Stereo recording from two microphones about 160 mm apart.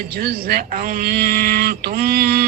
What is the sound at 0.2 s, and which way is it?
Speech, 70° right (ahead or behind).